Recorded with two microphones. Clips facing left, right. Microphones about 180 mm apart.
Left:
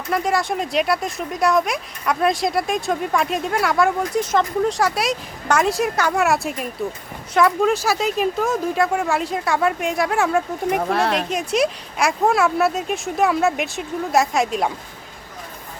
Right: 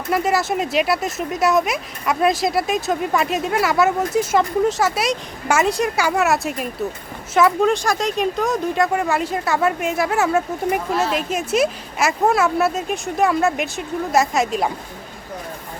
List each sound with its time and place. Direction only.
0.1 s speech: 5° right (ahead or behind)
10.8 s speech: 65° left (ahead or behind)
11.3 s speech: 5° right (ahead or behind)